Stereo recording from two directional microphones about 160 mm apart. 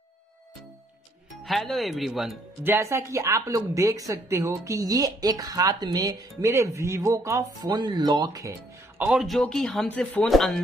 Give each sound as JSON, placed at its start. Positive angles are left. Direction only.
{"t": 1.4, "sound": "speech", "side_deg": 0}
{"t": 2.6, "sound": "speech", "side_deg": -15}